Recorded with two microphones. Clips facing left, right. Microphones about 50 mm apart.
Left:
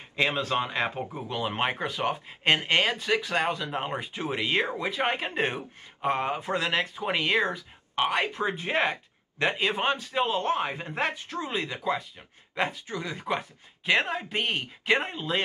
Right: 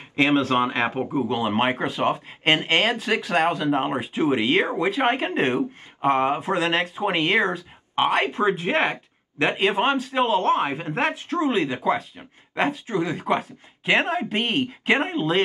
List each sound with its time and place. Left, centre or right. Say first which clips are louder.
0.1 s speech: right 7 dB; right
3.7 s speech: right 8 dB; right
4.0 s speech: right 9 dB; right
4.6 s speech: right 6 dB; right
13.3 s speech: right 6 dB; centre
13.8 s speech: right 4 dB; right